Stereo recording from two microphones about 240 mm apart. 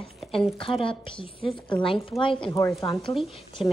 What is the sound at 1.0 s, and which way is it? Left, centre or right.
A woman's voice, left.